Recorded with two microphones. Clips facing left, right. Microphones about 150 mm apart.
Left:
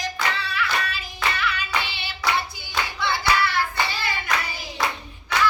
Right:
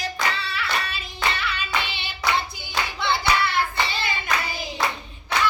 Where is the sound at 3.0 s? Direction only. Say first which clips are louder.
Even; 25° right (ahead or behind).